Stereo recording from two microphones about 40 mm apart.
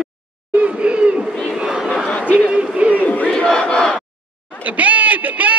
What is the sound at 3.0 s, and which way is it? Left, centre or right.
Battle cry, left.